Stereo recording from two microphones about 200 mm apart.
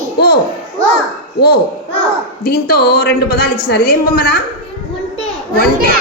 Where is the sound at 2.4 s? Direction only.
50° left (ahead or behind).